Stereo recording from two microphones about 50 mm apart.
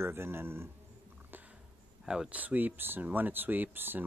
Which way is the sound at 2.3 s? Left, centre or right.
Right.